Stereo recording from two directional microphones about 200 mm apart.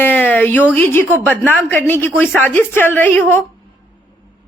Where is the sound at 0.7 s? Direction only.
10° left (ahead or behind).